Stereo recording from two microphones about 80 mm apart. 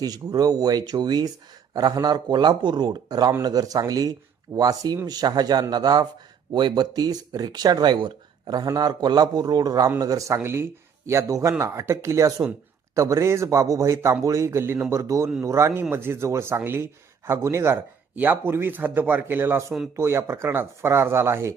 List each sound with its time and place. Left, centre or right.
0.0 s speech: right
6.5 s speech: right
10.3 s speech: right
11.3 s speech: right
11.6 s speech: right
18.1 s speech: right